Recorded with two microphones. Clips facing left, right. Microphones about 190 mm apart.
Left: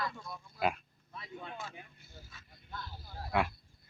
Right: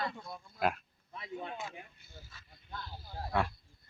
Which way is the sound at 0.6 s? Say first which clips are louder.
Even; centre (ahead or behind).